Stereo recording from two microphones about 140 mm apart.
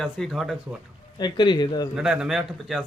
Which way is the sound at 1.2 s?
30° left (ahead or behind).